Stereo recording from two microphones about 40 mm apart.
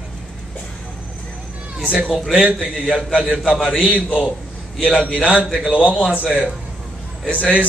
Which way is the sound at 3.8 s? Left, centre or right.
Right.